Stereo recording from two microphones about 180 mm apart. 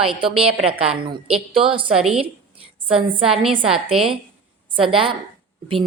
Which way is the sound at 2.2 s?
30° right (ahead or behind).